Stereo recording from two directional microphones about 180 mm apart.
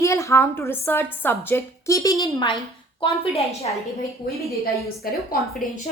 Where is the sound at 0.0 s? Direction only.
15° left (ahead or behind).